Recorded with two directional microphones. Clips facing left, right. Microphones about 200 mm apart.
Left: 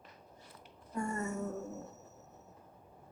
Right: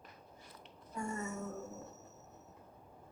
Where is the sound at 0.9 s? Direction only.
60° left (ahead or behind).